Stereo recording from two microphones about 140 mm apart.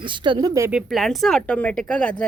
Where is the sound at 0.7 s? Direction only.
5° right (ahead or behind).